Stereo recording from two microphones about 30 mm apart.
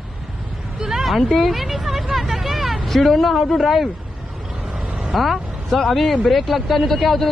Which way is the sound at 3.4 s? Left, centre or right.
Centre.